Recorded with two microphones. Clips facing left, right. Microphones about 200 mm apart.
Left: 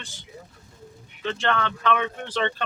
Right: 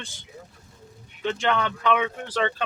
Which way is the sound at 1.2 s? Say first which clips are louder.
Right 1 dB; 15° right (ahead or behind).